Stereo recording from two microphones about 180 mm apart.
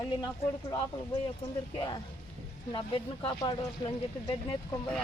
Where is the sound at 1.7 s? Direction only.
25° left (ahead or behind).